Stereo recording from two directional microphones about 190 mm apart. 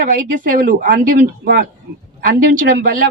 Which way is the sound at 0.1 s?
50° right (ahead or behind).